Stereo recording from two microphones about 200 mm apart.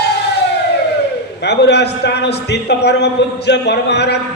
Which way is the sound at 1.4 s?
55° left (ahead or behind).